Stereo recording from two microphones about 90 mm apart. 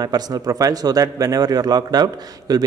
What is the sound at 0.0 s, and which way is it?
A man's voice, 45° right (ahead or behind).